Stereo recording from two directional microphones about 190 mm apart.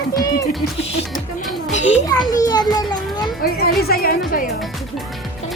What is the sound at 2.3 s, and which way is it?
Children playing, 20° left (ahead or behind).